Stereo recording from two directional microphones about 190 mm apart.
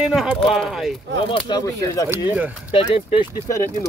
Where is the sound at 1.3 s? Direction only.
25° left (ahead or behind).